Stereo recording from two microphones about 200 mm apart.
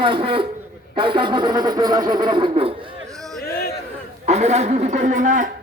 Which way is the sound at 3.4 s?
50° left (ahead or behind).